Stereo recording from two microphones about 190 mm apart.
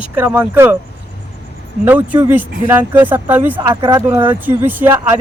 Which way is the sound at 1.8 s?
10° right (ahead or behind).